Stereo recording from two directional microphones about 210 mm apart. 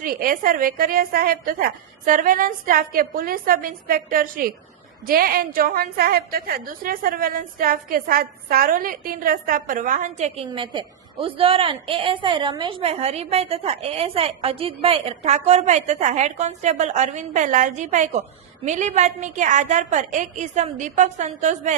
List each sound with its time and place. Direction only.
0.0 s a woman's voice: 45° right (ahead or behind)